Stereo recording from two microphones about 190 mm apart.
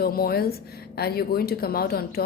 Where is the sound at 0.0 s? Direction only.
50° left (ahead or behind).